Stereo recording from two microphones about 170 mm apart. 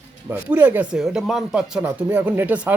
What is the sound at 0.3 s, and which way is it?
Speech, 10° right (ahead or behind).